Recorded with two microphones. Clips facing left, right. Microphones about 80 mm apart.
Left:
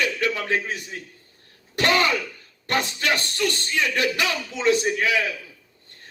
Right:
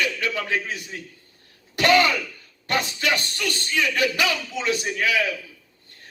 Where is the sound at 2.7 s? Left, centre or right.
Left.